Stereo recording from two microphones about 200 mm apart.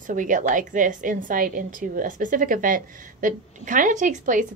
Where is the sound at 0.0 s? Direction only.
40° right (ahead or behind).